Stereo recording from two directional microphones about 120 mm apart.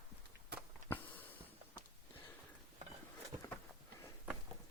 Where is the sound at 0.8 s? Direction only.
90° right.